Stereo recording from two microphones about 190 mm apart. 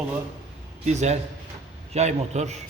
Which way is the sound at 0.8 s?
35° right (ahead or behind).